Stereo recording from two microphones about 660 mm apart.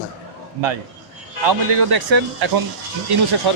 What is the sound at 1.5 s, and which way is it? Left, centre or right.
Speech, right.